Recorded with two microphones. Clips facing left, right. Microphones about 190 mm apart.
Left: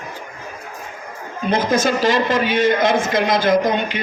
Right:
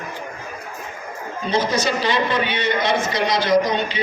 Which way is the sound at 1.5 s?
50° left (ahead or behind).